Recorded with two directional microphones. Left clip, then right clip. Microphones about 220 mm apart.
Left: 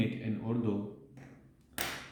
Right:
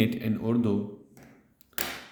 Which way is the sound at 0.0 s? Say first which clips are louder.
Right 8 dB; 50° right (ahead or behind).